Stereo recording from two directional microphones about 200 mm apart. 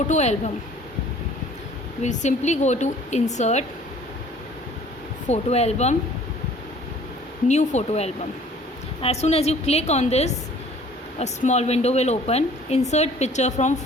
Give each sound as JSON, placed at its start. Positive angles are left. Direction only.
{"t": 0.1, "sound": "a woman's voice", "side_deg": 35}
{"t": 2.0, "sound": "a woman's voice", "side_deg": 35}
{"t": 5.3, "sound": "a woman's voice", "side_deg": 35}
{"t": 7.4, "sound": "a woman's voice", "side_deg": 35}